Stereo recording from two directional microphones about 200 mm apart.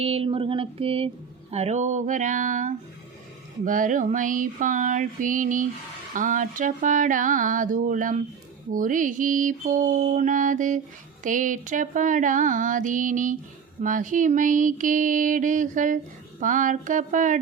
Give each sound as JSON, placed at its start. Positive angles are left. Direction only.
{"t": 0.0, "sound": "speech", "side_deg": -30}